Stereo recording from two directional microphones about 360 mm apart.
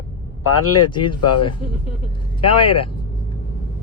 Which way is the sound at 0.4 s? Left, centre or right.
Left.